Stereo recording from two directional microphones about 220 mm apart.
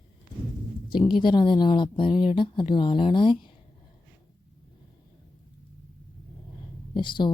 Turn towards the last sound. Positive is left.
turn(degrees=20)  # may be behind; listen again after turning